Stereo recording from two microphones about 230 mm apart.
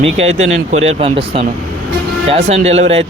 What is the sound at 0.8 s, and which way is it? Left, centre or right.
A man's voice, right.